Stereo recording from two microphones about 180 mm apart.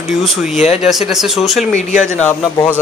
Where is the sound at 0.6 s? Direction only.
35° left (ahead or behind).